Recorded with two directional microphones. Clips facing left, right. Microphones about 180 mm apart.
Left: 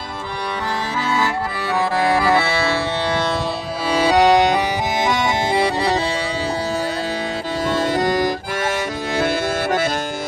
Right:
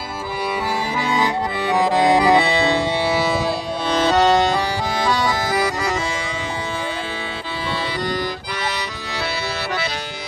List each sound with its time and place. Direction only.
1.1 s accordion: 15° right (ahead or behind)
3.1 s music: 5° right (ahead or behind)
3.9 s music: 10° left (ahead or behind); by 6.0 s 30° left (ahead or behind)
7.8 s accordion: 45° left (ahead or behind)